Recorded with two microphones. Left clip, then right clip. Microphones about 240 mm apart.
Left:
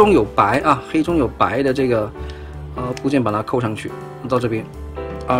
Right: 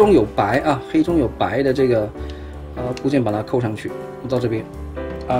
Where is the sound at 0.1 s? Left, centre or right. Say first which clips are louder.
Left 1 dB; centre.